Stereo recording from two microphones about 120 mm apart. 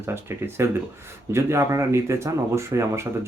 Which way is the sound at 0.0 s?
20° right (ahead or behind).